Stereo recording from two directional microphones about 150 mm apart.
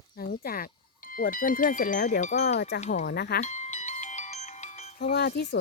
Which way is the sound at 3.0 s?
90° left.